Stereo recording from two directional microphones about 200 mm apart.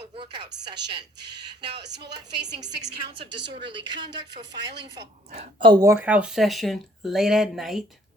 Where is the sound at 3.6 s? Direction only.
25° right (ahead or behind); by 7.8 s centre (ahead or behind).